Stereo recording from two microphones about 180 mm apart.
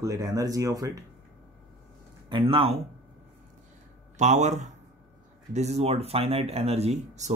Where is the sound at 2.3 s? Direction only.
30° right (ahead or behind).